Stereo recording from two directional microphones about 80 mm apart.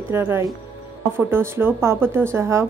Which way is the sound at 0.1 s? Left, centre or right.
Right.